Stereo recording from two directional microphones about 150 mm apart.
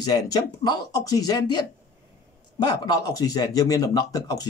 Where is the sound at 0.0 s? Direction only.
25° left (ahead or behind).